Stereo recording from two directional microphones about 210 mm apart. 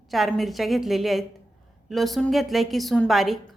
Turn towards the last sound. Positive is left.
turn(degrees=0)  # may be behind; listen again after turning